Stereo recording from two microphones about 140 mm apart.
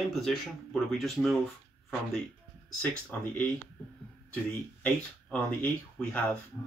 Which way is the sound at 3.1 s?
10° left (ahead or behind).